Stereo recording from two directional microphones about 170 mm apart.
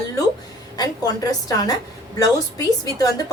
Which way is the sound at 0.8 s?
20° left (ahead or behind).